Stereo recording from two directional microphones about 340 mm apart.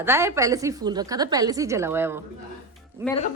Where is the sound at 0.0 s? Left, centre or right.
Centre.